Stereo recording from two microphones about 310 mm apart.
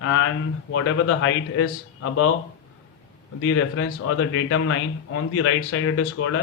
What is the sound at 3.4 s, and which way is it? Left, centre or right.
Speech, left.